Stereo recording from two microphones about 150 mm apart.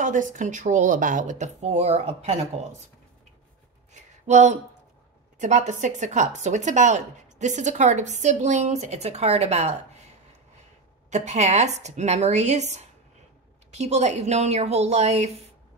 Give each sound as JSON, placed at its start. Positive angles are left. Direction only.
{"t": 0.0, "sound": "speech", "side_deg": -60}
{"t": 3.9, "sound": "a sound", "side_deg": -50}
{"t": 5.4, "sound": "speech", "side_deg": -55}
{"t": 11.1, "sound": "speech", "side_deg": -50}